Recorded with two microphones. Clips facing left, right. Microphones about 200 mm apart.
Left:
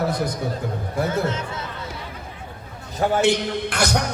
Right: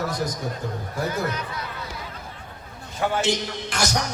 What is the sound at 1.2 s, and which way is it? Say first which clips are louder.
Speech: left 3 dB; 25° left (ahead or behind).